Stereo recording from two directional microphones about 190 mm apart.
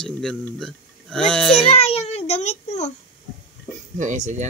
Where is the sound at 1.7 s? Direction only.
30° left (ahead or behind).